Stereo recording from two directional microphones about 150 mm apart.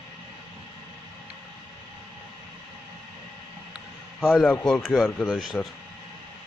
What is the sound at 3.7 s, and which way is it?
Speech, centre (ahead or behind).